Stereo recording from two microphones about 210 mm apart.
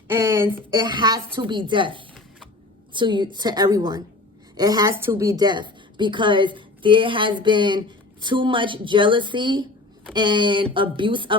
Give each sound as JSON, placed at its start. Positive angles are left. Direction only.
{"t": 0.1, "sound": "a woman's voice", "side_deg": -10}